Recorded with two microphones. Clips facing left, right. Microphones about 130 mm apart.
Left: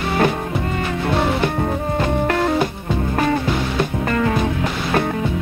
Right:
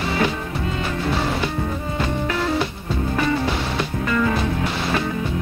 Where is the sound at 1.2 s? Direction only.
55° left (ahead or behind).